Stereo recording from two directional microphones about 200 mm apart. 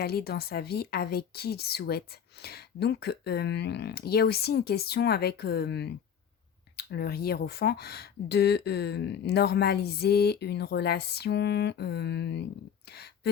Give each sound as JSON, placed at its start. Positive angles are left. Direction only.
{"t": 0.0, "sound": "speech", "side_deg": 50}